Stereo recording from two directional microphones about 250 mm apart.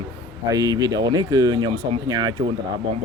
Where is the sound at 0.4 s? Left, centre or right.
Centre.